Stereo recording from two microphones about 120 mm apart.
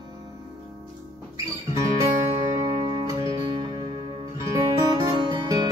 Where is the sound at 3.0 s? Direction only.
40° right (ahead or behind).